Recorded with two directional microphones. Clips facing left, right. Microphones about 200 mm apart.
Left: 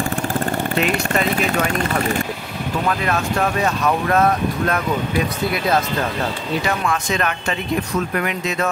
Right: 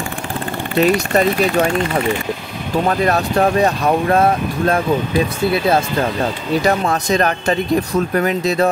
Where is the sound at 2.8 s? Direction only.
35° right (ahead or behind).